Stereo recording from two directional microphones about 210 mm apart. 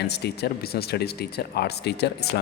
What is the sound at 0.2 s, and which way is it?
Speech, 50° left (ahead or behind).